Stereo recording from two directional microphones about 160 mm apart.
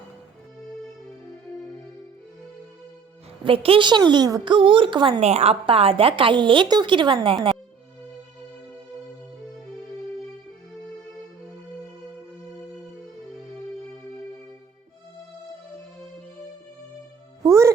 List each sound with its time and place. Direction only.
3.4 s a woman's voice: 35° right (ahead or behind)
5.2 s a woman's voice: 40° right (ahead or behind)
17.4 s music: 20° right (ahead or behind)